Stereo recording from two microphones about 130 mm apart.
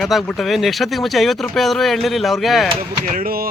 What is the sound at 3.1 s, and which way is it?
Speech, 90° right.